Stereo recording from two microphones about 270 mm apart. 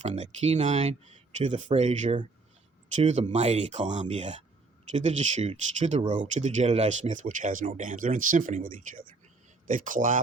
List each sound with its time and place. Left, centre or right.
0.0 s speech: right